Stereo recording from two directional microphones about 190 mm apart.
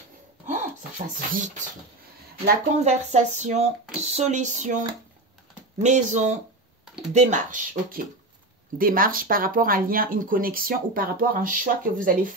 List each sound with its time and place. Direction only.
0.5 s a sound: 40° right (ahead or behind)
2.8 s speech: 35° right (ahead or behind)
5.8 s speech: 40° right (ahead or behind)